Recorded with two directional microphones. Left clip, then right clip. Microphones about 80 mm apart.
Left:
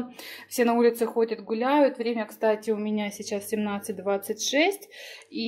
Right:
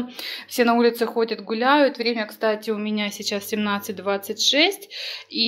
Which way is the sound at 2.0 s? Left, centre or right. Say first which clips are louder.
Right 4 dB; left.